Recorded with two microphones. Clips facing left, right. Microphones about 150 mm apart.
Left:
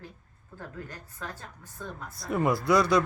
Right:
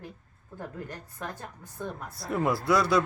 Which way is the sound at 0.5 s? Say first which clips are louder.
Right 3 dB; 15° right (ahead or behind).